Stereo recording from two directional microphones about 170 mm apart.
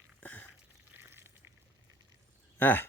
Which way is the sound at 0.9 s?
15° right (ahead or behind).